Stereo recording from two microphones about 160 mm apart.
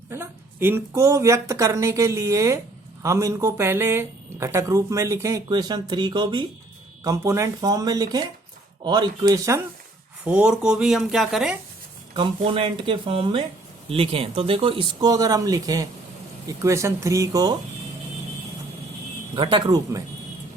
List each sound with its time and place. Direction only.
0.1 s a woman's voice: 15° right (ahead or behind)
10.2 s speech: 5° right (ahead or behind)
12.4 s a woman's voice: 35° right (ahead or behind)
19.4 s a woman's voice: 30° right (ahead or behind)